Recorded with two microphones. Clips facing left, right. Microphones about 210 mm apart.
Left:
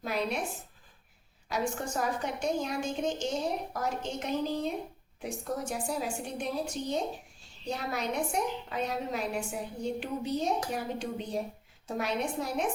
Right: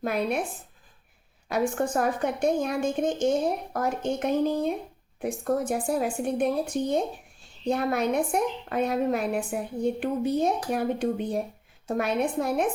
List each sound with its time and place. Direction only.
0.0 s a woman's voice: 55° right (ahead or behind)
1.5 s a woman's voice: 55° right (ahead or behind)